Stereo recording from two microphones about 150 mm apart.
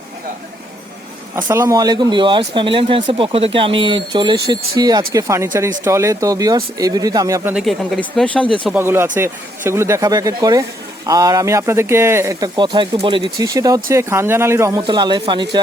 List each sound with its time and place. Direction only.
1.5 s speech: 20° right (ahead or behind)
7.5 s speech: centre (ahead or behind)
8.6 s speech: 15° right (ahead or behind); by 13.2 s 35° right (ahead or behind)
13.4 s speech: 25° right (ahead or behind)
14.8 s speech: 30° right (ahead or behind)